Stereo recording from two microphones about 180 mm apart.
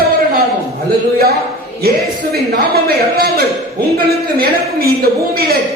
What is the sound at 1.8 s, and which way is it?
A man's voice, 60° right (ahead or behind).